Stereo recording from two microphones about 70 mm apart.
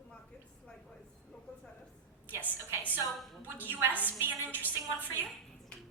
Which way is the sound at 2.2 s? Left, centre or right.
Right.